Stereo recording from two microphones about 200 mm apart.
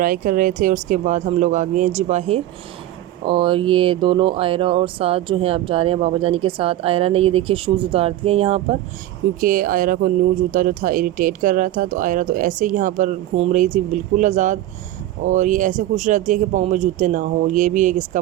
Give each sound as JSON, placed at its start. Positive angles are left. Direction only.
{"t": 0.0, "sound": "speech", "side_deg": -45}
{"t": 9.4, "sound": "speech", "side_deg": -40}